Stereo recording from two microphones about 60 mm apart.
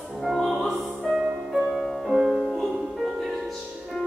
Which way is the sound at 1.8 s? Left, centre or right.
Centre.